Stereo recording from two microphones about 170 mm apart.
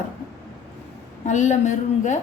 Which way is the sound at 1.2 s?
45° left (ahead or behind).